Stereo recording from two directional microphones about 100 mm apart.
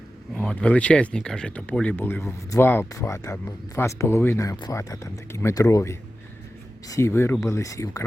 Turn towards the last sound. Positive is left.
turn(degrees=35)  # may be behind; listen again after turning